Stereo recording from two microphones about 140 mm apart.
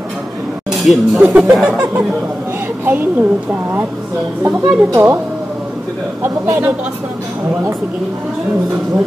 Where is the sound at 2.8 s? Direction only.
15° right (ahead or behind).